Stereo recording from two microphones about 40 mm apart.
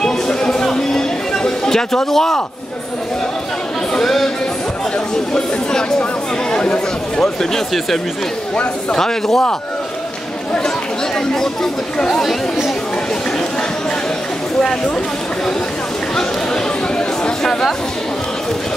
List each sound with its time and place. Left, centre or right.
0.0 s a sound: centre
4.0 s speech: centre
5.3 s speech: centre
6.5 s speech: left
8.9 s speech: centre
11.3 s speech: centre
17.4 s speech: centre